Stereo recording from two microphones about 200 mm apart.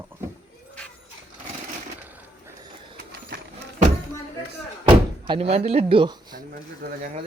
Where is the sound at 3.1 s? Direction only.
50° right (ahead or behind).